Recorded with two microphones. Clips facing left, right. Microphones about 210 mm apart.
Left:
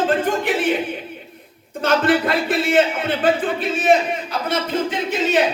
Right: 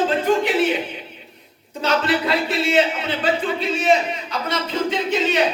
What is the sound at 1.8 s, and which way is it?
Speech, 50° left (ahead or behind).